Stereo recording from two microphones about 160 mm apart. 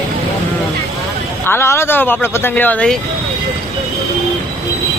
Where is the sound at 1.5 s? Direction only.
15° left (ahead or behind).